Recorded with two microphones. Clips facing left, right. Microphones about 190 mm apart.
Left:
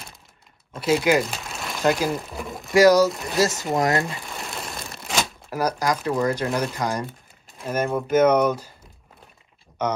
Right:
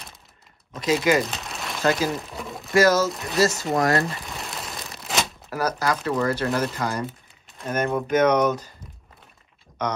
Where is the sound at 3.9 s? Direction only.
Centre (ahead or behind).